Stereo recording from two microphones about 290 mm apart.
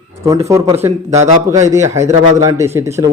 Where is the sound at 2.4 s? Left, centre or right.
Centre.